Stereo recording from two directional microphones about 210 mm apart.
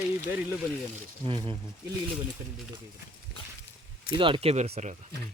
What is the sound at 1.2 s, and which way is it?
Speech, 25° right (ahead or behind).